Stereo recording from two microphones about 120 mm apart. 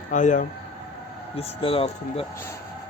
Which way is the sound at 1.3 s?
50° left (ahead or behind).